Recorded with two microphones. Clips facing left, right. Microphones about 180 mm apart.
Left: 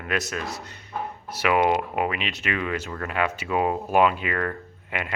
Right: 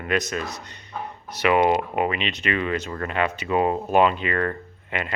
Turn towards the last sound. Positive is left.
turn(degrees=5)  # may be behind; listen again after turning